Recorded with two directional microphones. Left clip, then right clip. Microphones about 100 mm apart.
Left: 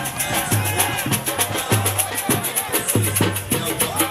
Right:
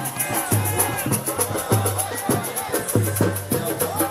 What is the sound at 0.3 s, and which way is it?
Music, 10° left (ahead or behind).